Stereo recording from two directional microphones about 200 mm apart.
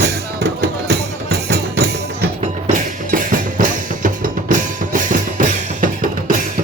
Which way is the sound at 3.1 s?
40° right (ahead or behind).